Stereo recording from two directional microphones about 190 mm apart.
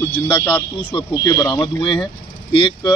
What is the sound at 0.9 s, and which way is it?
Speech, 20° left (ahead or behind).